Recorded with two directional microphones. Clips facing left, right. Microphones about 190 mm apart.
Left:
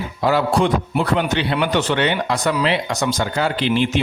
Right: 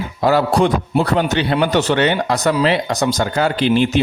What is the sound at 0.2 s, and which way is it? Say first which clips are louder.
A man's voice: right 3 dB; 40° right (ahead or behind).